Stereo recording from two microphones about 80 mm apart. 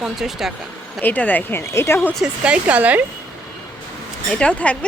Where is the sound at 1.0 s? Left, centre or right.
Left.